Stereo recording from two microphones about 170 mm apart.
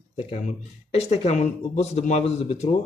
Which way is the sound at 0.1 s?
40° left (ahead or behind).